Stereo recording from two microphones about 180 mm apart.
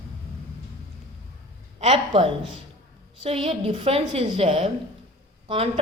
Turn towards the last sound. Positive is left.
turn(degrees=-30)  # may be behind; listen again after turning